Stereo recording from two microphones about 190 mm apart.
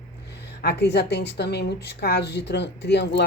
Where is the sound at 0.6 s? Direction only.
60° left (ahead or behind).